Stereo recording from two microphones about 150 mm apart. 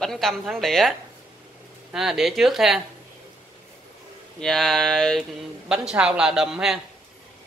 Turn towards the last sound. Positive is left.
turn(degrees=-5)  # may be behind; listen again after turning